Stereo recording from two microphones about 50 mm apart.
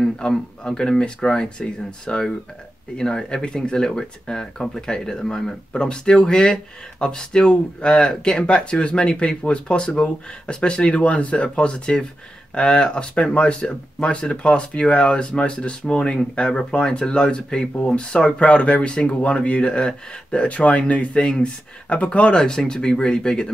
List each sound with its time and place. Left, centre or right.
0.2 s speech: centre
22.4 s speech: centre